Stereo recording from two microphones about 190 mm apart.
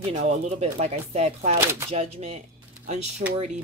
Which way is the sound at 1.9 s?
30° right (ahead or behind).